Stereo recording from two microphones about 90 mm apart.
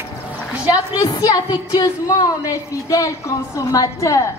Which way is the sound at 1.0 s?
55° left (ahead or behind).